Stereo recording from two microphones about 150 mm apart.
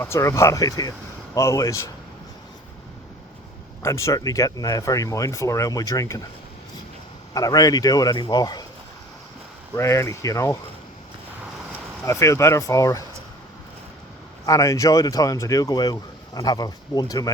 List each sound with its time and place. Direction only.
0.0 s speech: 20° left (ahead or behind)
3.8 s speech: 20° left (ahead or behind)
7.3 s speech: 25° left (ahead or behind)
9.7 s speech: 20° left (ahead or behind)
12.0 s speech: 20° left (ahead or behind)
14.4 s speech: 20° left (ahead or behind)